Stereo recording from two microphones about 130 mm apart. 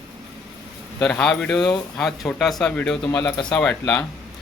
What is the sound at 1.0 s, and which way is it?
Speech, 5° left (ahead or behind).